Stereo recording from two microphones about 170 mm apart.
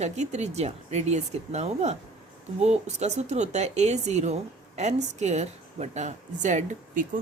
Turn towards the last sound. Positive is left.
turn(degrees=-50)  # may be behind; listen again after turning